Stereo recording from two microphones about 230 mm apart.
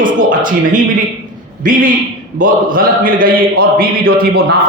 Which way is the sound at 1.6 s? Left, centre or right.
Right.